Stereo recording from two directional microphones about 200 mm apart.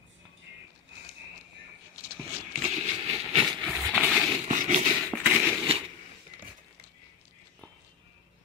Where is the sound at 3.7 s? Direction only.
Centre (ahead or behind).